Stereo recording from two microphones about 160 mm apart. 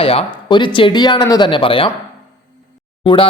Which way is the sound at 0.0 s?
35° left (ahead or behind).